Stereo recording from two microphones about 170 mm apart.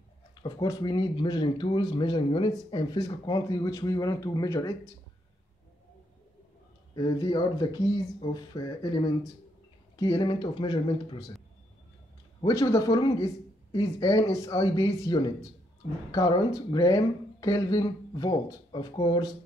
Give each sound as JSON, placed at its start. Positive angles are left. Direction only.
{"t": 0.4, "sound": "speech", "side_deg": 25}
{"t": 7.0, "sound": "speech", "side_deg": 25}
{"t": 12.4, "sound": "speech", "side_deg": 20}